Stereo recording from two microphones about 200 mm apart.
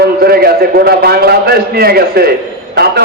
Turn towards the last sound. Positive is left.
turn(degrees=-55)  # may be behind; listen again after turning